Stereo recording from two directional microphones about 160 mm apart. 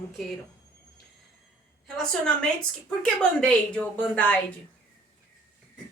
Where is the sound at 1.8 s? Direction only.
5° left (ahead or behind).